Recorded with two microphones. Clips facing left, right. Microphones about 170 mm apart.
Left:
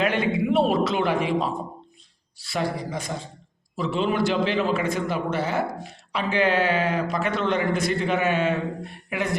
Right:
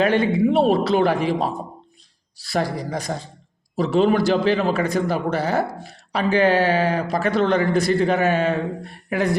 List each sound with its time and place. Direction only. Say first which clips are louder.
0.0 s a man's voice: right 5 dB; 30° right (ahead or behind)